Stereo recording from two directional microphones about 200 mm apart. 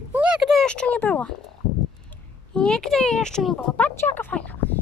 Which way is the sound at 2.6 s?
5° left (ahead or behind).